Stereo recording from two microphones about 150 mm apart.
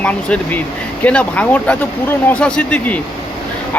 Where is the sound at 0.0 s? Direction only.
10° left (ahead or behind).